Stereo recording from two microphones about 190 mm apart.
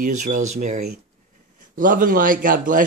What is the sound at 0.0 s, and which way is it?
A man's voice, 40° right (ahead or behind).